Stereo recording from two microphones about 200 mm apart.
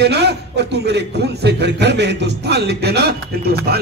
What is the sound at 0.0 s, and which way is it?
Speech, 55° right (ahead or behind).